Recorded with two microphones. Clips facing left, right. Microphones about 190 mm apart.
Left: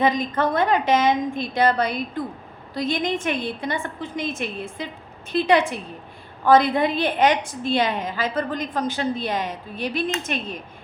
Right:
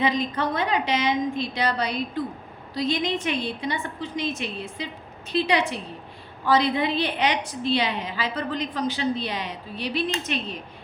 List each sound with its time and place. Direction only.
0.0 s a woman's voice: 50° left (ahead or behind)